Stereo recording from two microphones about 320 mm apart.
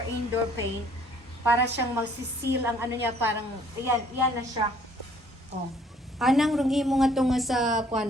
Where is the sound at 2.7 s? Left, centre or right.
Centre.